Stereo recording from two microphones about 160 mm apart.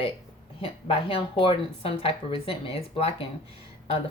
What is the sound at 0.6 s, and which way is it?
Speech, 35° left (ahead or behind).